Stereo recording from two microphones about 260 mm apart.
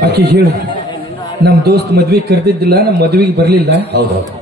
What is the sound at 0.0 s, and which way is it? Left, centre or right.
Speech, right.